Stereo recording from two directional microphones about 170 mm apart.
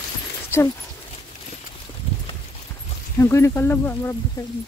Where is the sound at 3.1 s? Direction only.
15° left (ahead or behind).